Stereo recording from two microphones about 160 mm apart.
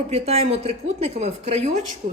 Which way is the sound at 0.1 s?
40° right (ahead or behind).